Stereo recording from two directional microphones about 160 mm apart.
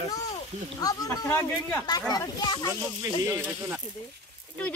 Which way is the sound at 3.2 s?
15° right (ahead or behind).